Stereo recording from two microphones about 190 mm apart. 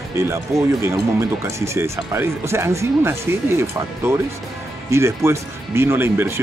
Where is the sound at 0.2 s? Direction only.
15° right (ahead or behind).